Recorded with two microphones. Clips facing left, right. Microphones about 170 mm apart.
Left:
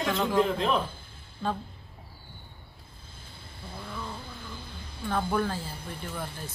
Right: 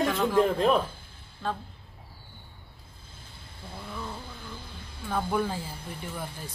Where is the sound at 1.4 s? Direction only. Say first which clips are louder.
Left 1 dB; centre (ahead or behind).